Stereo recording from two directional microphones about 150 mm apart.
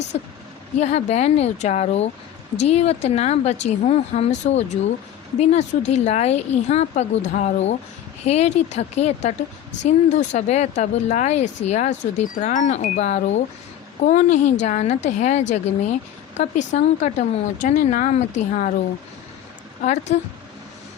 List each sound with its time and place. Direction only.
0.1 s speech: 50° left (ahead or behind)
19.8 s speech: 50° left (ahead or behind)